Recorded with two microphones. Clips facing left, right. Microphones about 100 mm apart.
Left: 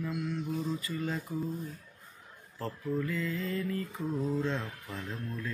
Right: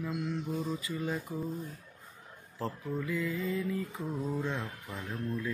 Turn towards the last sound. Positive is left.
turn(degrees=-15)  # may be behind; listen again after turning